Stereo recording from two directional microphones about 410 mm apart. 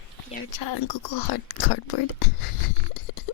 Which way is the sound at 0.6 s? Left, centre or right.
Left.